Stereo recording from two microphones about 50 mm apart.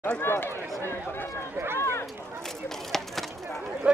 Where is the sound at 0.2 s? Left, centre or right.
Left.